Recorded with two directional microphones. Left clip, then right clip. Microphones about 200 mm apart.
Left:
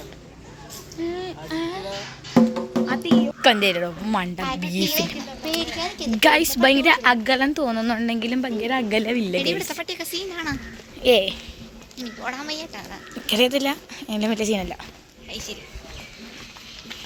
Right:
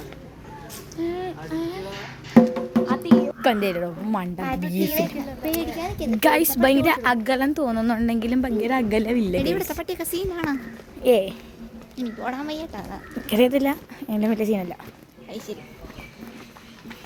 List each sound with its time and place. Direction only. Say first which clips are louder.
1.0 s speech: even; centre (ahead or behind)
2.4 s music: right 2 dB; 5° right (ahead or behind)
2.8 s music: even; 45° left (ahead or behind)
3.1 s a woman's voice: left 3 dB; centre (ahead or behind)
4.8 s a child's voice: even; 50° right (ahead or behind)
6.1 s a woman's voice: left 2 dB; centre (ahead or behind)
9.4 s speech: even; 40° right (ahead or behind)
11.0 s speech: left 1 dB; 5° right (ahead or behind)
11.9 s a child's voice: right 1 dB; 45° right (ahead or behind)
13.2 s speech: even; 20° right (ahead or behind); by 14.8 s 5° right (ahead or behind)
15.3 s speech: left 1 dB; 35° right (ahead or behind)